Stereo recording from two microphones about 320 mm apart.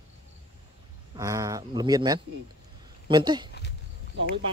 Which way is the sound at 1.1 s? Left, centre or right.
Centre.